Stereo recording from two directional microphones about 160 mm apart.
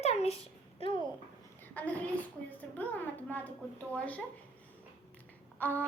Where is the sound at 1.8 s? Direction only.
10° left (ahead or behind).